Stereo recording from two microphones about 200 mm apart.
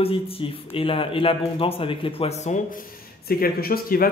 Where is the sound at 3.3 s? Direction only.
50° left (ahead or behind).